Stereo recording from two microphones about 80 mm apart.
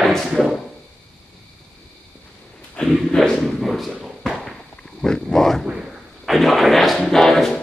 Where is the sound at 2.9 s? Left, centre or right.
Centre.